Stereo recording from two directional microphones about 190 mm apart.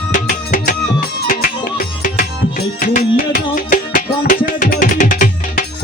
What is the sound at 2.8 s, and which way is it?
Music, 45° left (ahead or behind).